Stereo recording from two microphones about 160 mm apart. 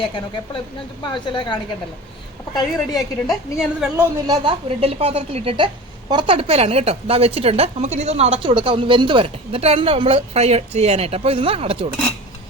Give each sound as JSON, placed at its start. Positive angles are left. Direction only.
{"t": 0.0, "sound": "a woman's voice", "side_deg": 35}
{"t": 2.9, "sound": "a woman's voice", "side_deg": 0}
{"t": 4.3, "sound": "a woman's voice", "side_deg": -35}